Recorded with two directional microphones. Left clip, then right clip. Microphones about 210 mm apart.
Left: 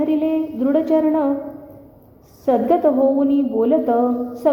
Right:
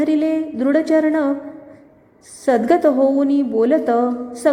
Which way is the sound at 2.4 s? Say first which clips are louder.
Right 1 dB; 20° right (ahead or behind).